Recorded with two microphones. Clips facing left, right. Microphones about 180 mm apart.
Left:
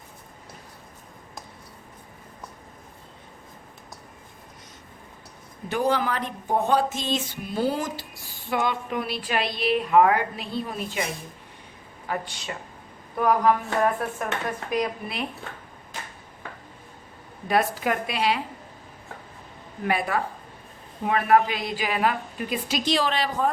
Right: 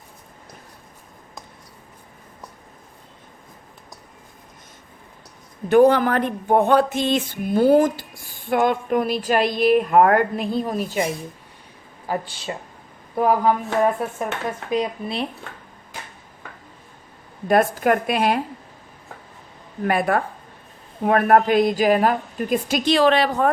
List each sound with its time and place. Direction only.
5.6 s speech: 55° right (ahead or behind)
12.0 s speech: 30° right (ahead or behind)
14.7 s speech: 25° right (ahead or behind)
17.5 s speech: 50° right (ahead or behind)
19.8 s speech: 50° right (ahead or behind)